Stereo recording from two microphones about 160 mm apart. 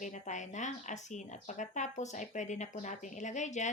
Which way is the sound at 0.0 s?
50° left (ahead or behind).